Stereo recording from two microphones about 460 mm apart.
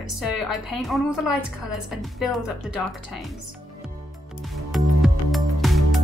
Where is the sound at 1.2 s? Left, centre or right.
Left.